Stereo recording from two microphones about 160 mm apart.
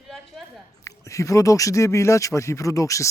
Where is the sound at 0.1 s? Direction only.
Centre (ahead or behind).